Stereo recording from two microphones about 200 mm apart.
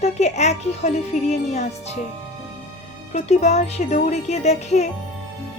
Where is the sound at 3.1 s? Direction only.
35° left (ahead or behind).